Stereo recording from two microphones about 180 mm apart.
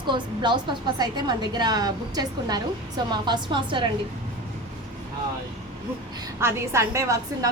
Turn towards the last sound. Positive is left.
turn(degrees=-15)  # may be behind; listen again after turning